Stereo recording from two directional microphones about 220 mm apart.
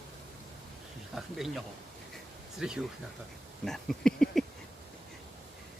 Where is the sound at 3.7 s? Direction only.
Centre (ahead or behind).